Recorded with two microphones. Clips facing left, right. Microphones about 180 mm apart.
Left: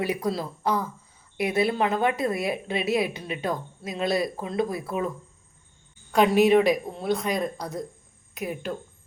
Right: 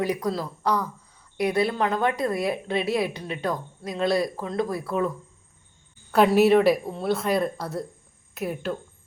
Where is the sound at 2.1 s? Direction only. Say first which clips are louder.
Right 1 dB; 20° left (ahead or behind).